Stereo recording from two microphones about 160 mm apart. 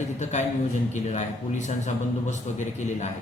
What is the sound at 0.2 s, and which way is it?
A man's voice, 45° left (ahead or behind).